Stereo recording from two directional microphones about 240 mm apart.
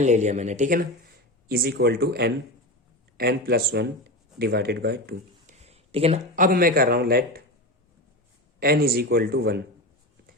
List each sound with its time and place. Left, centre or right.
0.0 s speech: right
5.6 s speech: right
8.5 s speech: right